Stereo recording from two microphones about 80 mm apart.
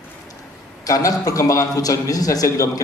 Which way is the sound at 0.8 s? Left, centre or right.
Left.